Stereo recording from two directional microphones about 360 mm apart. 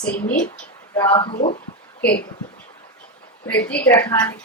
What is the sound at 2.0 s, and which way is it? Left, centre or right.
Speech, left.